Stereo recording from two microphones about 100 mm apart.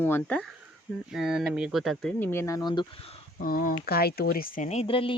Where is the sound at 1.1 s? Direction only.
5° right (ahead or behind).